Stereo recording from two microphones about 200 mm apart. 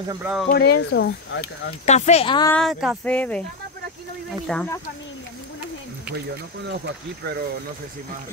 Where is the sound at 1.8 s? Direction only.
35° left (ahead or behind).